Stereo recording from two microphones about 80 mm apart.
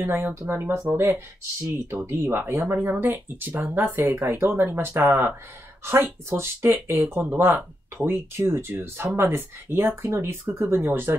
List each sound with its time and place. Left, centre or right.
0.0 s speech: right